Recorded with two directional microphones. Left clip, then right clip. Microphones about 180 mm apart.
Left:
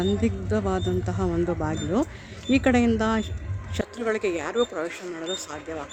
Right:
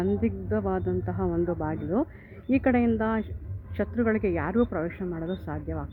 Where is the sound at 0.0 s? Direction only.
Centre (ahead or behind).